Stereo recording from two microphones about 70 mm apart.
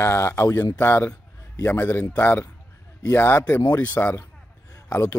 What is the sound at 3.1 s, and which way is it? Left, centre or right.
Speech, left.